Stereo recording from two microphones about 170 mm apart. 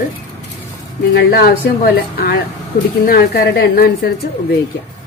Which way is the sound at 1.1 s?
65° left (ahead or behind).